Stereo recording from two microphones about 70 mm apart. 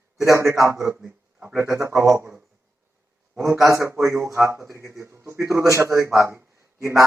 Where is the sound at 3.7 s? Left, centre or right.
Right.